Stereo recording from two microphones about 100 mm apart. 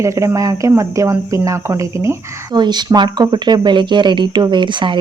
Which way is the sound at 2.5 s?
45° right (ahead or behind).